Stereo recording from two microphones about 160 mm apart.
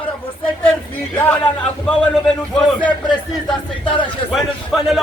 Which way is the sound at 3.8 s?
30° left (ahead or behind).